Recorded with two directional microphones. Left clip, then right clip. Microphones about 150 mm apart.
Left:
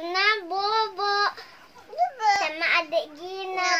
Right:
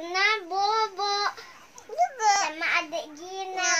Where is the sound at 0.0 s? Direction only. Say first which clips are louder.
Left 1 dB; 10° left (ahead or behind).